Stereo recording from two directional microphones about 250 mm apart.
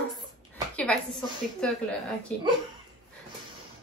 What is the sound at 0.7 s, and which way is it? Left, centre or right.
A woman's voice, centre.